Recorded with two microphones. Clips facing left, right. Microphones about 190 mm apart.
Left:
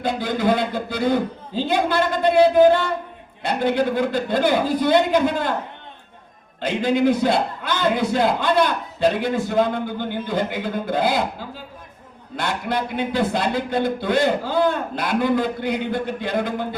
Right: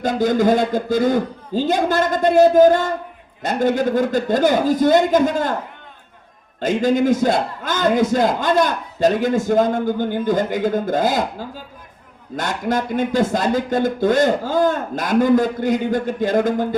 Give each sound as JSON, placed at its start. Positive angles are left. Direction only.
{"t": 0.0, "sound": "a man's voice", "side_deg": -45}
{"t": 6.6, "sound": "a man's voice", "side_deg": -45}